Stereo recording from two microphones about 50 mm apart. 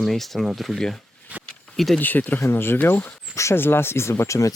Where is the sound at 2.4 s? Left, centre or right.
Left.